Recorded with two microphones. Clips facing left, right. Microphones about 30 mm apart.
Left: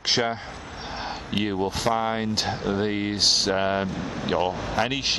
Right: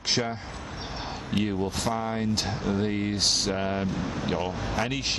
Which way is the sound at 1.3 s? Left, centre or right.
Left.